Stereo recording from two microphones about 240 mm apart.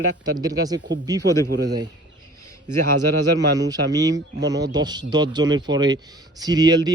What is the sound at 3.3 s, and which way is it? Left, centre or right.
Speech, centre.